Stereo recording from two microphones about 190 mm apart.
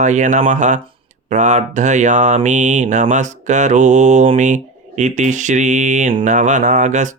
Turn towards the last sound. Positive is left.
turn(degrees=-40)  # may be behind; listen again after turning